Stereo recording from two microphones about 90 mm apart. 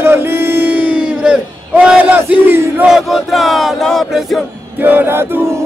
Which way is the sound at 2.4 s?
25° right (ahead or behind).